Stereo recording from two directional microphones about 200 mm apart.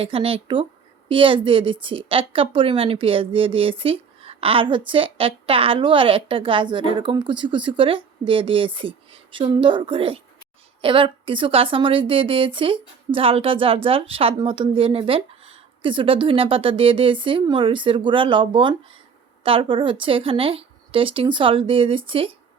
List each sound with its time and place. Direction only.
0.0 s a woman's voice: 30° right (ahead or behind)